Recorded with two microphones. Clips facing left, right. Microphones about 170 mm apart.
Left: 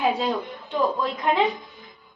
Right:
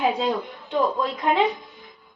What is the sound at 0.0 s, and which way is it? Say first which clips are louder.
Speech: right 1 dB; centre (ahead or behind).